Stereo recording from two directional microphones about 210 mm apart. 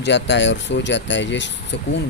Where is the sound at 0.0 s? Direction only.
55° left (ahead or behind).